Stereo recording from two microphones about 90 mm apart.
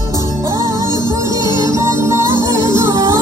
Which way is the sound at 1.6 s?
35° right (ahead or behind).